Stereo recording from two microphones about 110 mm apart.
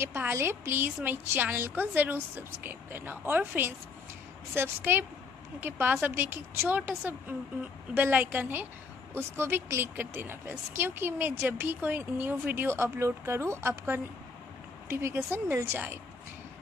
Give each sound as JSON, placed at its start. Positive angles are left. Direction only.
{"t": 0.0, "sound": "a woman's voice", "side_deg": -20}